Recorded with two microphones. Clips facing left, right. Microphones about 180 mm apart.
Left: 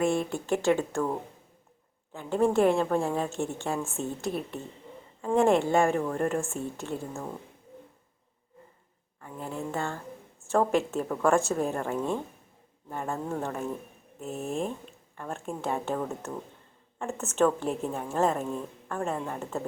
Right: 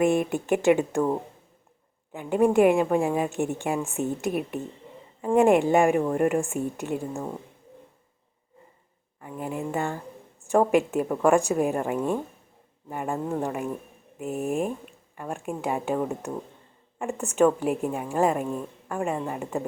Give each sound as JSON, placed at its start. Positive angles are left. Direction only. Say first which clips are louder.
{"t": 0.0, "sound": "a woman's voice", "louder": "right 4 dB", "side_deg": -15}
{"t": 2.1, "sound": "a woman's voice", "louder": "right 4 dB", "side_deg": -15}
{"t": 9.2, "sound": "a woman's voice", "louder": "right 4 dB", "side_deg": -15}